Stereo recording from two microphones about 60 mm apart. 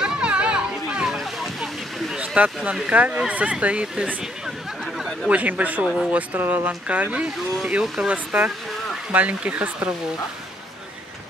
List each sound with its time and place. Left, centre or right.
0.0 s children playing: centre
1.0 s a sound: centre
2.1 s speech: right
5.3 s speech: right
7.8 s speech: centre
8.1 s speech: right